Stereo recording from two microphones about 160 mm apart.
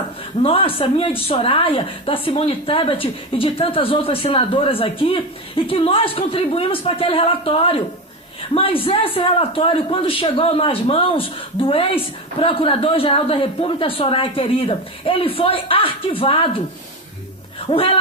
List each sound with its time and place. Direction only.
0.4 s a man's voice: 35° left (ahead or behind)
17.7 s a man's voice: 35° left (ahead or behind)